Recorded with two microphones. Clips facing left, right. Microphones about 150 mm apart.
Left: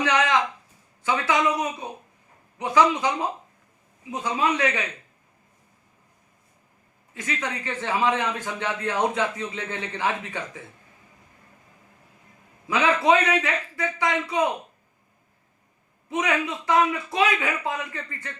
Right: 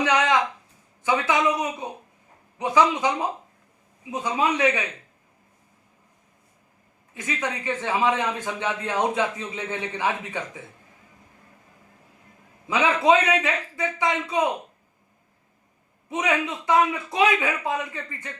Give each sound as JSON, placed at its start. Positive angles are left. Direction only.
{"t": 0.0, "sound": "a sound", "side_deg": -15}
{"t": 1.0, "sound": "a man's voice", "side_deg": -15}
{"t": 4.1, "sound": "a man's voice", "side_deg": -15}
{"t": 7.1, "sound": "a man's voice", "side_deg": -20}
{"t": 12.6, "sound": "a man's voice", "side_deg": -20}
{"t": 16.0, "sound": "a man's voice", "side_deg": -20}